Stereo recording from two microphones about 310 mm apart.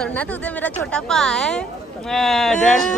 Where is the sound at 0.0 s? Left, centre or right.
Centre.